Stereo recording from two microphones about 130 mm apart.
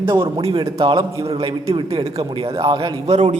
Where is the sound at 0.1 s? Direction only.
25° right (ahead or behind).